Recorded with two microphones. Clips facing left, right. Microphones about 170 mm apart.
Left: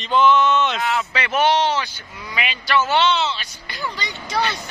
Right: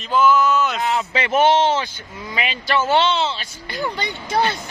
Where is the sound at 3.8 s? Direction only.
50° right (ahead or behind).